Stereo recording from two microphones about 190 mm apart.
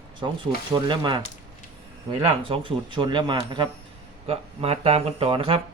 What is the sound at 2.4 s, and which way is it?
Speech, 25° right (ahead or behind).